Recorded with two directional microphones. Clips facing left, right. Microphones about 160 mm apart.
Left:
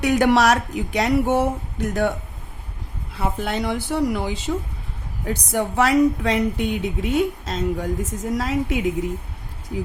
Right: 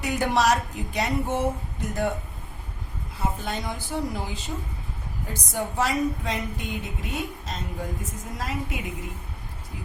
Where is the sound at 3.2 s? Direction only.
70° left (ahead or behind); by 8.9 s 90° left.